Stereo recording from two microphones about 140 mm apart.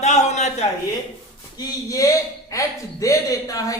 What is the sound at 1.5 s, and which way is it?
Speech, 25° left (ahead or behind).